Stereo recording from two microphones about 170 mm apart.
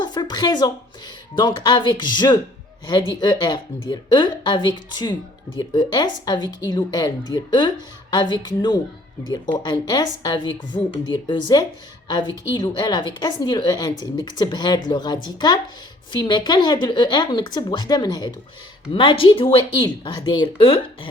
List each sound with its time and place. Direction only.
0.0 s a woman's voice: 25° left (ahead or behind)